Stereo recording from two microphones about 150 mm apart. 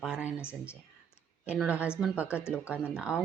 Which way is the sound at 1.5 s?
10° right (ahead or behind).